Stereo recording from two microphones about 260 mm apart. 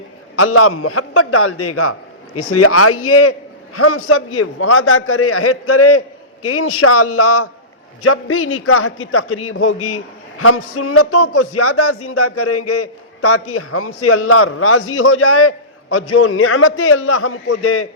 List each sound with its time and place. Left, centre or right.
0.3 s a man's voice: left